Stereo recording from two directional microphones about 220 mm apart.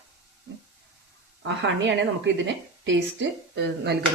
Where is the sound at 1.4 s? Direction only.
55° right (ahead or behind).